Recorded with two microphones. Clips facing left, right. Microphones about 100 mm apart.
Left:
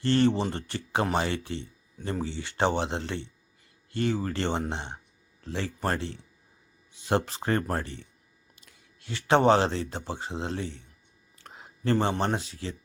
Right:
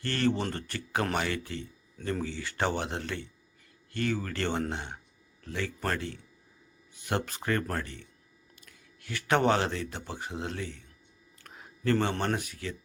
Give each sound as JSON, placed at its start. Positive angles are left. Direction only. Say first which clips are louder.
{"t": 0.0, "sound": "speech", "louder": "left 5 dB", "side_deg": 25}
{"t": 11.4, "sound": "a sound", "louder": "left 1 dB", "side_deg": 25}
{"t": 12.2, "sound": "speech", "louder": "left 2 dB", "side_deg": 25}